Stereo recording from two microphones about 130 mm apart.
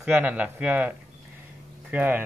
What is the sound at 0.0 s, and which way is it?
Speech, 10° right (ahead or behind).